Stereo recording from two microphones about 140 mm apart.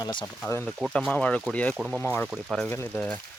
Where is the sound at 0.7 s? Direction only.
Centre (ahead or behind).